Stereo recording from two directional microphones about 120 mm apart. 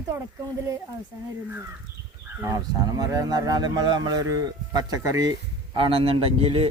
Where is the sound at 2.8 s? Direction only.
35° right (ahead or behind).